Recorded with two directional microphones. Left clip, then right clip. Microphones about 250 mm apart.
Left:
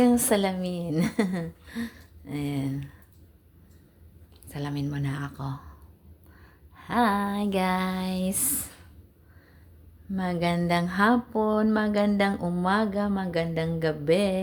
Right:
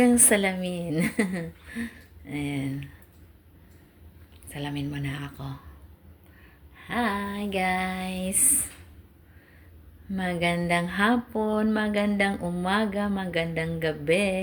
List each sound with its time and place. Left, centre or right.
0.0 s speech: centre
4.4 s speech: centre
6.8 s speech: centre
10.1 s speech: centre